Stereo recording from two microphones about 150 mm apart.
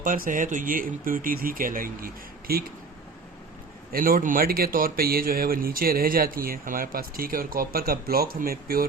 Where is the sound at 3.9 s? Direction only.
70° right (ahead or behind).